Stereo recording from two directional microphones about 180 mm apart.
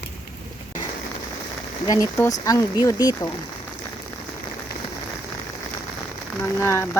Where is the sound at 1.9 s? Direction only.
15° left (ahead or behind).